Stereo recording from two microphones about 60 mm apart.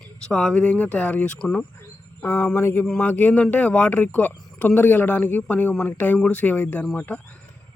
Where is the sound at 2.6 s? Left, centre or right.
Left.